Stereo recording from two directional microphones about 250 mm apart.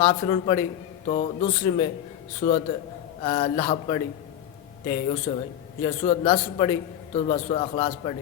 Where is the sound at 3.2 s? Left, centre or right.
Centre.